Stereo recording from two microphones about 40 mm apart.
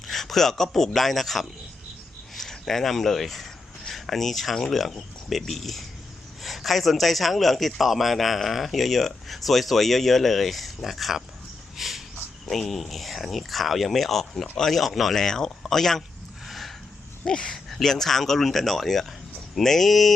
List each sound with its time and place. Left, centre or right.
0.1 s speech: centre
11.8 s a sound: centre
12.5 s speech: centre
15.1 s speech: centre
16.5 s a sound: centre
17.2 s speech: centre